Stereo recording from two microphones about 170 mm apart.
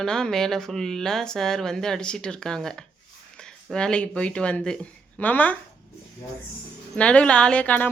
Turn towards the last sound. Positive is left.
turn(degrees=10)  # may be behind; listen again after turning